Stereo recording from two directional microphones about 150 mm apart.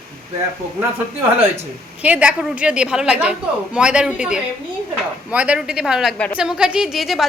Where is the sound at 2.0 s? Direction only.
10° right (ahead or behind).